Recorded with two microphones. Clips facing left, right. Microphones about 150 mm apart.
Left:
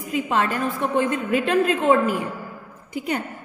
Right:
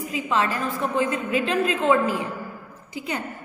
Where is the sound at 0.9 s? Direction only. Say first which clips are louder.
Left 2 dB; 50° left (ahead or behind).